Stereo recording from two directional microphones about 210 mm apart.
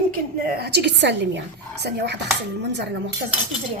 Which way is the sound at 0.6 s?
55° right (ahead or behind).